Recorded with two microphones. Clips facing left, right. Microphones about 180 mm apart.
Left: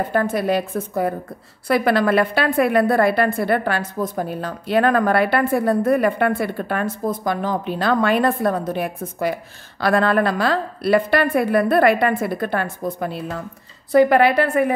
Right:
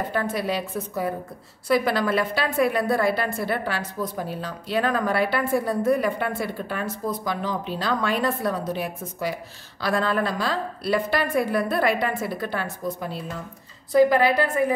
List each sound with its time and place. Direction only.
0.1 s a woman's voice: 50° left (ahead or behind)
1.7 s a woman's voice: 60° left (ahead or behind)